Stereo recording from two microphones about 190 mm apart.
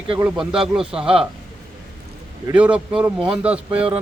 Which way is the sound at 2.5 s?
5° right (ahead or behind).